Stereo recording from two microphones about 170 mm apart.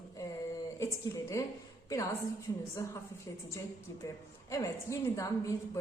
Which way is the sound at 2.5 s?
25° left (ahead or behind).